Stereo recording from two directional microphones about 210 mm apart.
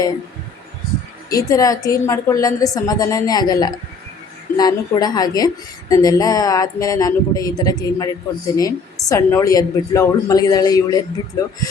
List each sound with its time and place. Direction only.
1.3 s a woman's voice: 15° left (ahead or behind)